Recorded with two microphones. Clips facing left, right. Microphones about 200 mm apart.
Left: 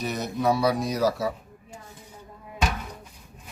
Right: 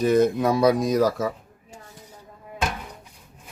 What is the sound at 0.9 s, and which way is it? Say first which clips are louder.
Speech: right 3 dB; 45° right (ahead or behind).